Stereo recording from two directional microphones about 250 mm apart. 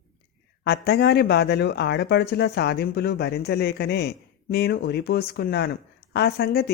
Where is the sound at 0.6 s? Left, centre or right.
Left.